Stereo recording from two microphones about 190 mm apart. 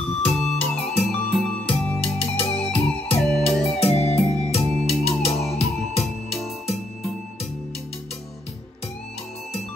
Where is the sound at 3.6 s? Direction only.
35° left (ahead or behind).